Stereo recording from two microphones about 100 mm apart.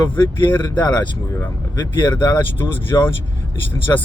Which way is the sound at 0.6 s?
45° left (ahead or behind).